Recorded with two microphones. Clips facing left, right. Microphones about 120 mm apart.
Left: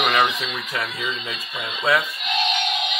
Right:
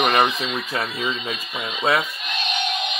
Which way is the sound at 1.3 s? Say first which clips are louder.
Right 2 dB; 20° right (ahead or behind).